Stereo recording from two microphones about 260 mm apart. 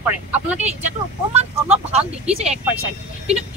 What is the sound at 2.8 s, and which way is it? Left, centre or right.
Speech, right.